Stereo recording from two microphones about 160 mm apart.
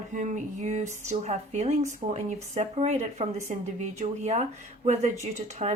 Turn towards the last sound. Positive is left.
turn(degrees=-45)  # may be behind; listen again after turning